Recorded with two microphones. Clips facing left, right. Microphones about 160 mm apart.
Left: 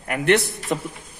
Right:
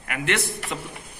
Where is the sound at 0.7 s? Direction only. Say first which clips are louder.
Left 10 dB; 50° left (ahead or behind).